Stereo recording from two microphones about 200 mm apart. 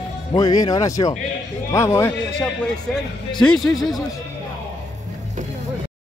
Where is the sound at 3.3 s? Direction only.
Centre (ahead or behind).